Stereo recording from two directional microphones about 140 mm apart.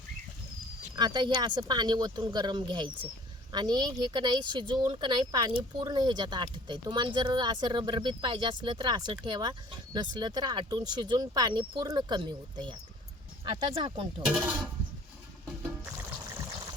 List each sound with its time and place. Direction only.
0.9 s speech: 30° right (ahead or behind)
14.3 s speech: 10° right (ahead or behind)
15.8 s music: 20° right (ahead or behind)